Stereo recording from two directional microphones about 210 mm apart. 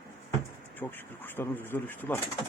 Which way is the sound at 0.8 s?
10° left (ahead or behind).